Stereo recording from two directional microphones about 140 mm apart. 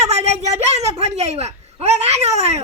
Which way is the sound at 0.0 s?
50° right (ahead or behind).